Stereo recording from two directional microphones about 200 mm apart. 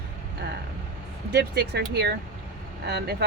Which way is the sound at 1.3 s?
55° right (ahead or behind).